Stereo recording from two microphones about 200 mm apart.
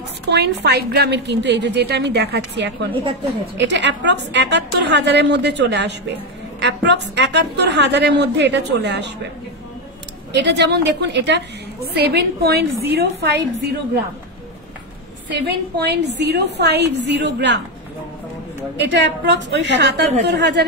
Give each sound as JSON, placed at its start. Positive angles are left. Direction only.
{"t": 0.3, "sound": "a woman's voice", "side_deg": -55}
{"t": 10.3, "sound": "a woman's voice", "side_deg": -60}
{"t": 15.3, "sound": "a woman's voice", "side_deg": -55}
{"t": 18.8, "sound": "a woman's voice", "side_deg": -60}